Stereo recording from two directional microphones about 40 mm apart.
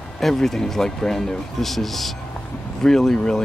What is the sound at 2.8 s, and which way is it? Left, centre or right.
Speech, centre.